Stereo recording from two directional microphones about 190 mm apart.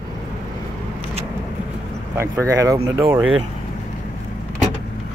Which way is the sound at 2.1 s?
15° right (ahead or behind).